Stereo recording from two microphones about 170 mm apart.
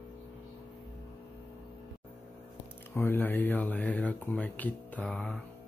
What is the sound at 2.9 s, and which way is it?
Speech, 10° left (ahead or behind).